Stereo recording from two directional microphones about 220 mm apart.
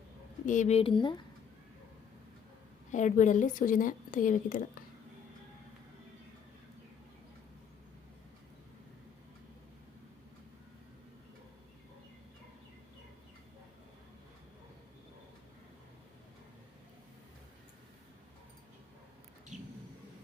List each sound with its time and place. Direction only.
0.4 s speech: 35° left (ahead or behind)
2.9 s a woman's voice: 35° left (ahead or behind)
19.5 s a sound: 35° right (ahead or behind)